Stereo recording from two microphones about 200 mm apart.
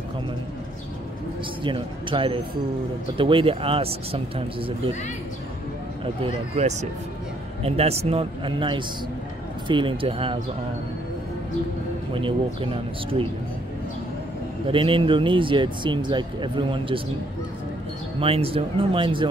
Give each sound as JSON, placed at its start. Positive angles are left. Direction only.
{"t": 1.6, "sound": "speech", "side_deg": -25}
{"t": 6.2, "sound": "speech", "side_deg": -30}
{"t": 12.1, "sound": "speech", "side_deg": -25}
{"t": 14.7, "sound": "speech", "side_deg": -25}
{"t": 18.2, "sound": "speech", "side_deg": -30}